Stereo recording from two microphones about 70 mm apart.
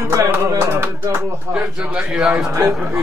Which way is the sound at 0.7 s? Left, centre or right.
Right.